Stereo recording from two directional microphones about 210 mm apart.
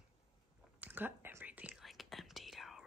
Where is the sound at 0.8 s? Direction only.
10° right (ahead or behind).